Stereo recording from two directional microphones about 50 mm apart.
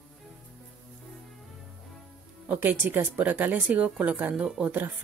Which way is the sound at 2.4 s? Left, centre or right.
Right.